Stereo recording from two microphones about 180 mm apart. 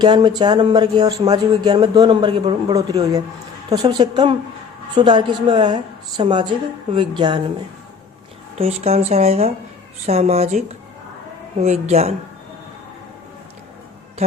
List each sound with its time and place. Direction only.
0.0 s speech: 25° right (ahead or behind)
8.5 s speech: 35° right (ahead or behind)